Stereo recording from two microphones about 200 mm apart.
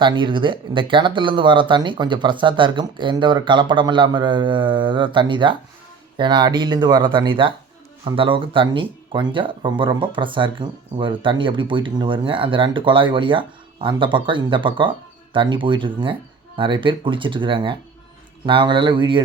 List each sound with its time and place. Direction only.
0.0 s speech: 25° right (ahead or behind)